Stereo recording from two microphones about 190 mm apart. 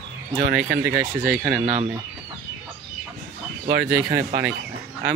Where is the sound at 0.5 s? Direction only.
50° right (ahead or behind).